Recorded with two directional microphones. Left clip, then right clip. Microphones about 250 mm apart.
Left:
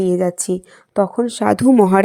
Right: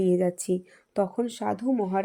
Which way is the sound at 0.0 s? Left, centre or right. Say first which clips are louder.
Left 7 dB; centre.